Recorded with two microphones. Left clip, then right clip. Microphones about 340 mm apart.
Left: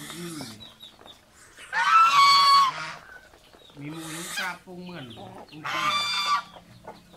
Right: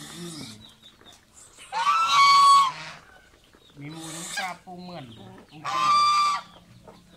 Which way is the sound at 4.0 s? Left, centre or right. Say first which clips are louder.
Even; centre.